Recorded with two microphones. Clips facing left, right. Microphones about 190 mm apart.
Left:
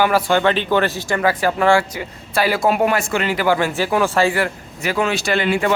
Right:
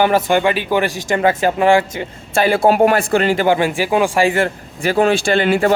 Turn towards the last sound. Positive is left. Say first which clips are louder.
# right 4 dB
turn(degrees=-40)  # may be behind; listen again after turning